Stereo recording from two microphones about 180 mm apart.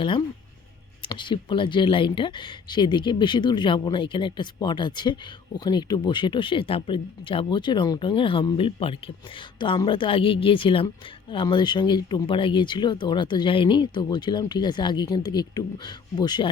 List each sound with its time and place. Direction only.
1.0 s speech: 25° left (ahead or behind)